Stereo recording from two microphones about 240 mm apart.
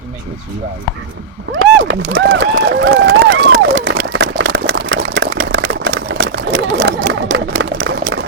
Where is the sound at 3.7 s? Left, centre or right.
Right.